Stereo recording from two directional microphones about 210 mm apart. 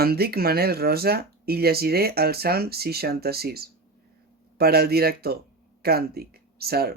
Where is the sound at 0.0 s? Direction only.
45° right (ahead or behind).